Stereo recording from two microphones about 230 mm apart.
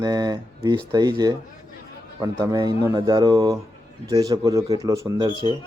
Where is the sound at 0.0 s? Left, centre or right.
Centre.